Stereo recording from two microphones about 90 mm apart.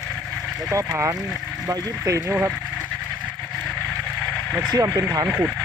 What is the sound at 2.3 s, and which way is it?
Speech, 20° right (ahead or behind).